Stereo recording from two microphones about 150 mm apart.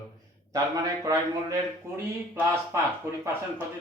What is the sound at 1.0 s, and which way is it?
Speech, 20° right (ahead or behind).